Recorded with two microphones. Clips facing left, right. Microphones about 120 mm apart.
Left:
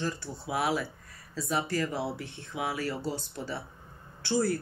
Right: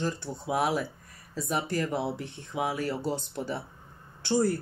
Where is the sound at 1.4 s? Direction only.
15° right (ahead or behind).